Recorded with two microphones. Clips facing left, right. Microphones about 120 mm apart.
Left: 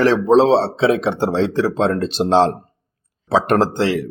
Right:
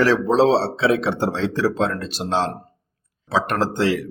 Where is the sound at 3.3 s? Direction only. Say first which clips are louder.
Left 5 dB; 25° left (ahead or behind).